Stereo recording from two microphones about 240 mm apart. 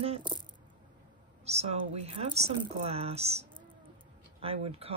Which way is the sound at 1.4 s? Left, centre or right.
Right.